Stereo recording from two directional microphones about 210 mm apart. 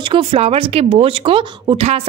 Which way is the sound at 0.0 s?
25° right (ahead or behind).